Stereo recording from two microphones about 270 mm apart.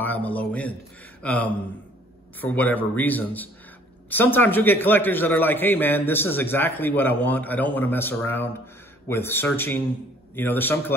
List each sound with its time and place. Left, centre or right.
0.0 s a man's voice: centre